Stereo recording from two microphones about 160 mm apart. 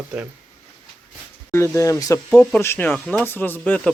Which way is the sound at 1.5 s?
15° left (ahead or behind).